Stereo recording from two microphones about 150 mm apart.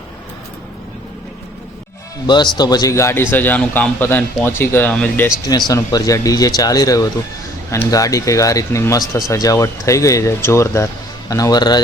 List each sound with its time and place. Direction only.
2.2 s speech: 30° left (ahead or behind); by 5.3 s 10° left (ahead or behind)
5.5 s speech: 25° left (ahead or behind)